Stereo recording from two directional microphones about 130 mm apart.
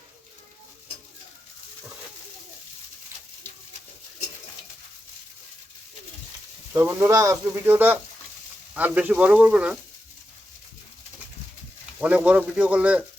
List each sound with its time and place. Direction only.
6.7 s speech: 15° right (ahead or behind)
11.9 s speech: 10° right (ahead or behind)